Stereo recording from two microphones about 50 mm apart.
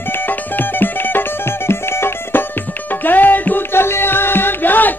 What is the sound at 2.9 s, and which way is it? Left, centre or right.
Music, left.